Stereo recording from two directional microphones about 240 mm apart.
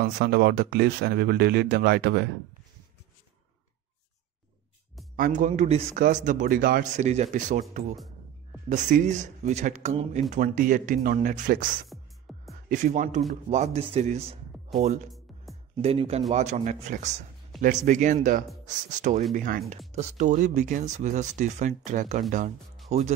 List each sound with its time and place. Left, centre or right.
0.0 s a man's voice: right
5.1 s a man's voice: right
8.6 s a man's voice: right
11.9 s music: centre
12.6 s a man's voice: right
15.7 s a man's voice: right